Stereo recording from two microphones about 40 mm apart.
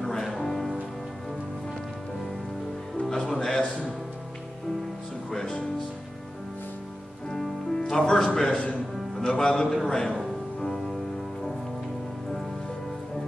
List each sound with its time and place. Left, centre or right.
0.0 s music: centre
3.2 s music: centre
5.3 s music: centre
7.2 s music: centre
8.3 s a sound: left
9.2 s a man's voice: centre